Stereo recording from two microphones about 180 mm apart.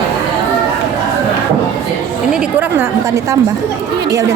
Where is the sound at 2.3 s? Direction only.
10° right (ahead or behind).